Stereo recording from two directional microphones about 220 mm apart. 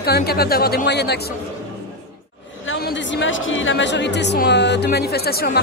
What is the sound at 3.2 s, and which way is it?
Speech, 60° left (ahead or behind).